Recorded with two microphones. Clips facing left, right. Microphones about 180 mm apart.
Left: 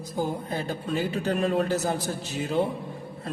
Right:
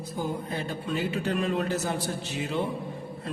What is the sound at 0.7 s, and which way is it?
A man's voice, 40° left (ahead or behind).